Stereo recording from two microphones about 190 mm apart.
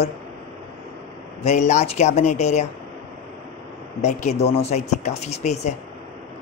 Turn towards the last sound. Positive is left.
turn(degrees=35)  # may be behind; listen again after turning